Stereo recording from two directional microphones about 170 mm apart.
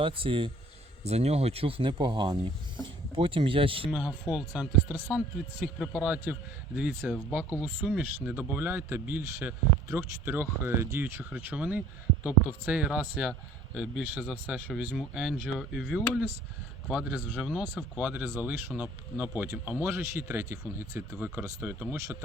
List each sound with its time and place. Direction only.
0.0 s speech: 30° right (ahead or behind)
3.9 s a man's voice: 5° right (ahead or behind)